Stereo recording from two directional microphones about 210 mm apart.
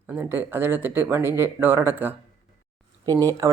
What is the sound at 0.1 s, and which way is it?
A woman's voice, 10° right (ahead or behind).